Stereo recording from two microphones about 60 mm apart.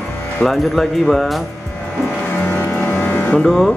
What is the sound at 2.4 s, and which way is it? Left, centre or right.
Music, left.